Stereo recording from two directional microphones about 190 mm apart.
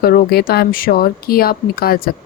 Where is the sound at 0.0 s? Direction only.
55° left (ahead or behind).